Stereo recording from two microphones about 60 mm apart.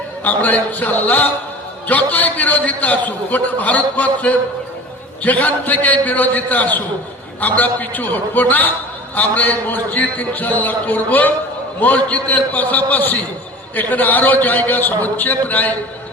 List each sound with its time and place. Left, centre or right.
0.3 s a man's voice: left